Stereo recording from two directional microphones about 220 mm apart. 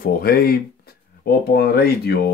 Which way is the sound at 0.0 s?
45° left (ahead or behind).